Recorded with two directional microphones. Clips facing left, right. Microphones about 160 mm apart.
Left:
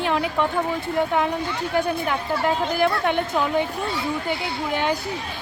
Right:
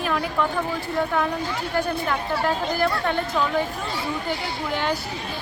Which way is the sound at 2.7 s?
15° left (ahead or behind).